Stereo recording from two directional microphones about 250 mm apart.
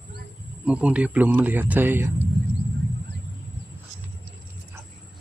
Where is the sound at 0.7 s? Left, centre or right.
Centre.